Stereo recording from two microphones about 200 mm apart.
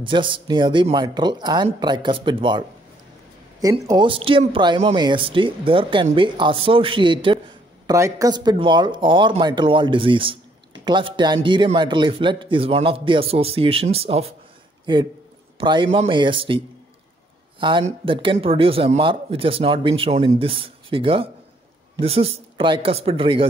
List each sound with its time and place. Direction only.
0.0 s a man's voice: 25° right (ahead or behind)
3.6 s a man's voice: 20° right (ahead or behind)